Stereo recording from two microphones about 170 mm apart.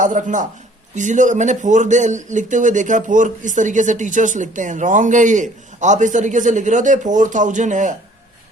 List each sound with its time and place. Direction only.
0.0 s speech: 50° right (ahead or behind)